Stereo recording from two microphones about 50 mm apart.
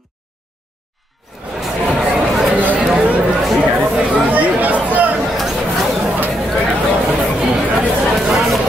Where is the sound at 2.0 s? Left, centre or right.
Centre.